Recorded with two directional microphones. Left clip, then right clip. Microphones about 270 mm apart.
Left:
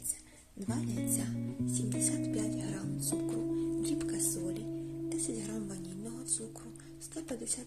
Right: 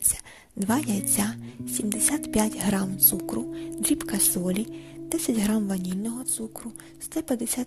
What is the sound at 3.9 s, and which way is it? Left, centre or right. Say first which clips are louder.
Speech: right 6 dB; right.